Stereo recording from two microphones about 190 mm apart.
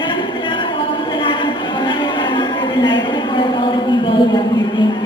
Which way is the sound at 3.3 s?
25° left (ahead or behind).